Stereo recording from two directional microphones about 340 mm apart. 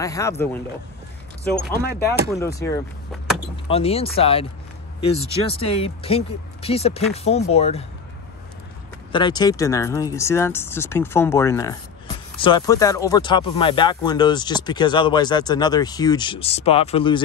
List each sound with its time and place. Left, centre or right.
0.0 s speech: centre
1.4 s speech: left
2.3 s speech: centre
3.6 s speech: centre
5.5 s speech: centre
9.1 s speech: centre